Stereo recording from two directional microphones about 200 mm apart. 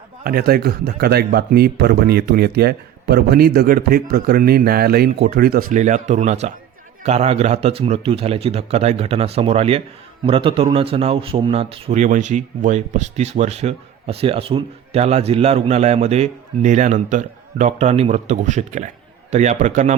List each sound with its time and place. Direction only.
0.3 s a man's voice: 50° right (ahead or behind)